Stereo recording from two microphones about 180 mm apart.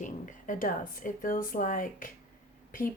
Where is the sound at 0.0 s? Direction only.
45° left (ahead or behind).